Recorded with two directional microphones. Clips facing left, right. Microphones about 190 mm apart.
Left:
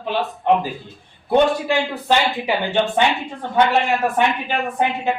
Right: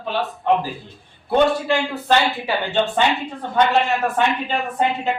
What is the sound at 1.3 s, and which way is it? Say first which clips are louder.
A man's voice: left 1 dB; 15° left (ahead or behind).